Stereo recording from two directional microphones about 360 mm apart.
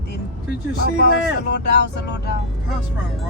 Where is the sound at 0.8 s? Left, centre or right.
Left.